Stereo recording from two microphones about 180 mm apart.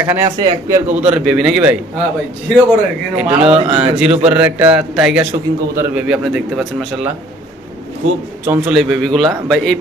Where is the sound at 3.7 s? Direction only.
5° right (ahead or behind).